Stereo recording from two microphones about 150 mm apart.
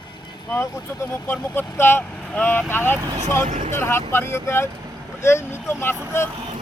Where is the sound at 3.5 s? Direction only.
50° right (ahead or behind).